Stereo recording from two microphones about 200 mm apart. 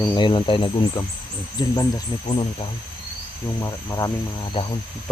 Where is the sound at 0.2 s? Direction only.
25° left (ahead or behind).